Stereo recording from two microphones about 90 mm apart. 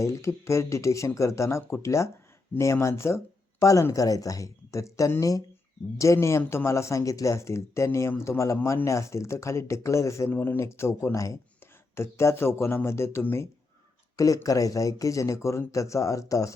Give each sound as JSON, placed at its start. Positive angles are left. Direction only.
{"t": 0.0, "sound": "speech", "side_deg": 35}
{"t": 2.5, "sound": "speech", "side_deg": 20}
{"t": 2.8, "sound": "speech", "side_deg": 30}
{"t": 10.3, "sound": "speech", "side_deg": 20}
{"t": 14.4, "sound": "speech", "side_deg": 40}